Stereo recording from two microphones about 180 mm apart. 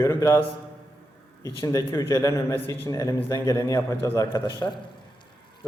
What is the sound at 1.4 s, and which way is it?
A man's voice, 20° left (ahead or behind).